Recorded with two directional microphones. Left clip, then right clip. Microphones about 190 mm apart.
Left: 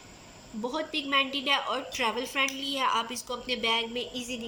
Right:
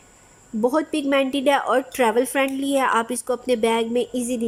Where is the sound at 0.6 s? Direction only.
65° right (ahead or behind).